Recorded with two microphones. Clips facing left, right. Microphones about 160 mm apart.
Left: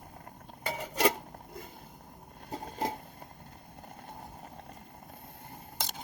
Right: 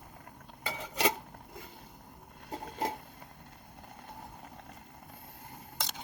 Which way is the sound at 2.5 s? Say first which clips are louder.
Left 1 dB; 40° left (ahead or behind).